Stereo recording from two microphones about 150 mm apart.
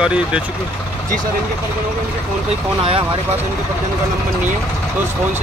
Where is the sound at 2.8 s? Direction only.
35° right (ahead or behind).